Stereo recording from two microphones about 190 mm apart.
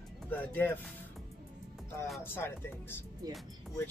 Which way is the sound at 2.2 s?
10° left (ahead or behind).